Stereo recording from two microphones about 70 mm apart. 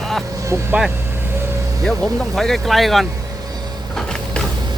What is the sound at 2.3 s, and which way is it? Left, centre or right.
Speech, centre.